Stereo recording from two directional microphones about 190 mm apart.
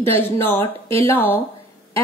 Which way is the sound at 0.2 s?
10° left (ahead or behind).